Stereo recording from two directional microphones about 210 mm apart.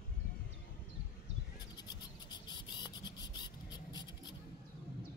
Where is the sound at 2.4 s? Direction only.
20° left (ahead or behind).